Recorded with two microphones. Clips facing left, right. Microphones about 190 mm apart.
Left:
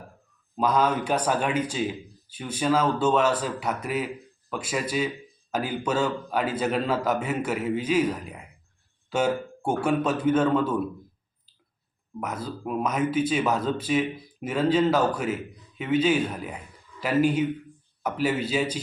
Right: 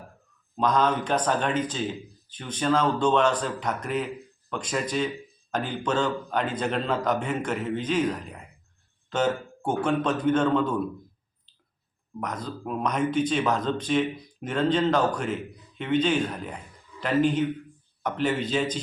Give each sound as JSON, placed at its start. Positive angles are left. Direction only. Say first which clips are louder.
{"t": 0.5, "sound": "speech", "louder": "even", "side_deg": 5}
{"t": 12.2, "sound": "speech", "louder": "left 1 dB", "side_deg": 5}